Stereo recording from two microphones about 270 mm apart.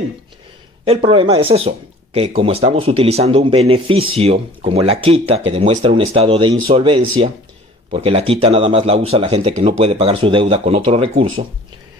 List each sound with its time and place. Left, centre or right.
0.8 s speech: right